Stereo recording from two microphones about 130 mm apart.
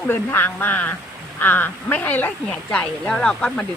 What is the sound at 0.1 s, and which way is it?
Speech, 15° left (ahead or behind).